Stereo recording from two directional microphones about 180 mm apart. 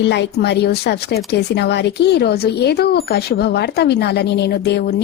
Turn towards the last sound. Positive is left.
turn(degrees=65)  # may be behind; listen again after turning